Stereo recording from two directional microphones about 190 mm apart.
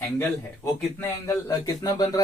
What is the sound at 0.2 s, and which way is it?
Speech, 10° left (ahead or behind).